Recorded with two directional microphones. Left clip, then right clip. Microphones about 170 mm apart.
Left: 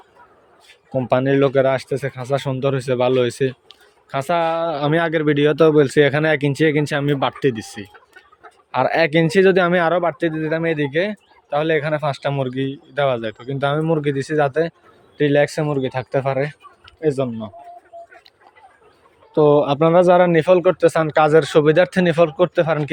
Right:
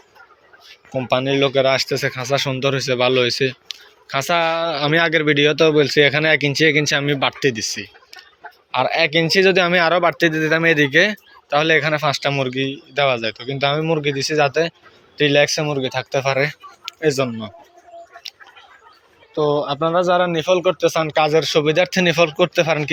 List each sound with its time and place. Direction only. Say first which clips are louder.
0.9 s a man's voice: left 1 dB; 35° left (ahead or behind)
10.0 s speech: right 4 dB; 10° left (ahead or behind)
19.3 s speech: left 5 dB; 45° left (ahead or behind); by 22.9 s 25° left (ahead or behind)